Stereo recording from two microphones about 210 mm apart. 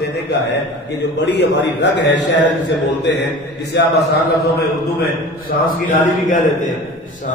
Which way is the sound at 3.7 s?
55° left (ahead or behind).